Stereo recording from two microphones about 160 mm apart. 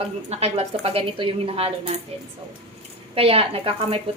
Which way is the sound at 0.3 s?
40° right (ahead or behind).